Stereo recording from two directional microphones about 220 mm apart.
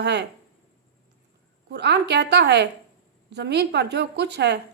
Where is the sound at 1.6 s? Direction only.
50° right (ahead or behind).